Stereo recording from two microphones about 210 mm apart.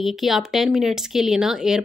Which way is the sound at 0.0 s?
Centre (ahead or behind).